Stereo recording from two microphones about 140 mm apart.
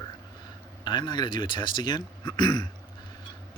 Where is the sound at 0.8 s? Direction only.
30° left (ahead or behind).